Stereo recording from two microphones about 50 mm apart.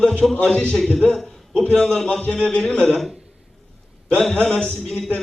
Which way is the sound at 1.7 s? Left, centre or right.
Centre.